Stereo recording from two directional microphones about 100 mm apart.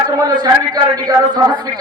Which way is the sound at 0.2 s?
40° right (ahead or behind).